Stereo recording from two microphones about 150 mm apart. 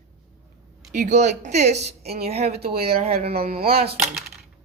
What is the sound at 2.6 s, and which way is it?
Speech, 90° right.